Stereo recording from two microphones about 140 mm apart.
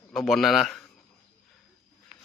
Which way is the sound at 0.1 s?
Centre (ahead or behind).